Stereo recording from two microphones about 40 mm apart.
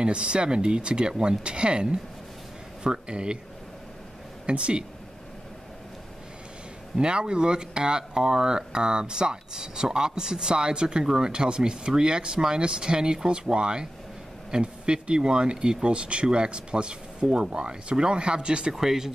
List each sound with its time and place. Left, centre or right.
0.0 s speech: right
4.5 s speech: right
7.0 s speech: right
18.8 s speech: centre